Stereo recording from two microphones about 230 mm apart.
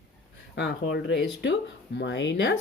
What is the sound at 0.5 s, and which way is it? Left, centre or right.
Speech, left.